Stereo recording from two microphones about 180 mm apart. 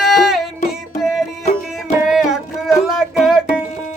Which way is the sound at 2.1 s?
5° right (ahead or behind).